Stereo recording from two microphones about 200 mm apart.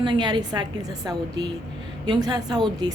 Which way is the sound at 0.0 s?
20° right (ahead or behind).